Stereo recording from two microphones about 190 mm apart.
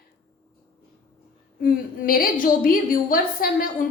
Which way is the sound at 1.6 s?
50° left (ahead or behind).